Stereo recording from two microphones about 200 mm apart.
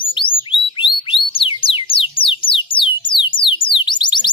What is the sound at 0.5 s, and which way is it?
Music, 25° left (ahead or behind).